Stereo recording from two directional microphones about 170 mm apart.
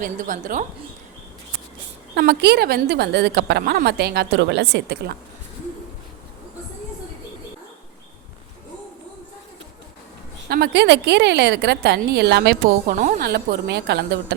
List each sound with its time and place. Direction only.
0.0 s a woman's voice: 50° right (ahead or behind)
2.1 s a woman's voice: 70° right (ahead or behind)
10.5 s a woman's voice: 75° right (ahead or behind)
12.9 s a woman's voice: 50° right (ahead or behind); by 14.3 s 85° right